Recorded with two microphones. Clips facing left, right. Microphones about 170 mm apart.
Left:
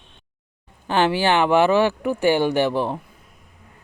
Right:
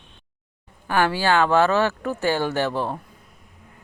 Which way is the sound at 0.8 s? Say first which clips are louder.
Left 2 dB; 25° left (ahead or behind).